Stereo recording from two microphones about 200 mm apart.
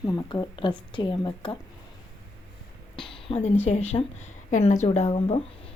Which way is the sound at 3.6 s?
35° left (ahead or behind).